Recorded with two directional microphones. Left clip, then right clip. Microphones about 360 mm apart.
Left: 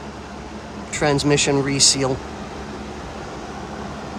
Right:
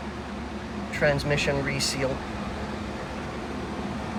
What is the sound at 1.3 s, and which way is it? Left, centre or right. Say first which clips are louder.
Speech: left 7 dB; centre.